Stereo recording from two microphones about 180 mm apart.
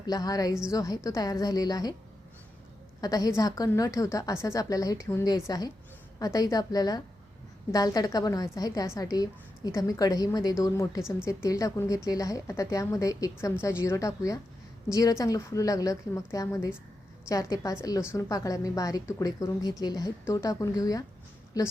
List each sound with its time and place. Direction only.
0.0 s a woman's voice: 20° left (ahead or behind)
3.0 s a woman's voice: 20° left (ahead or behind)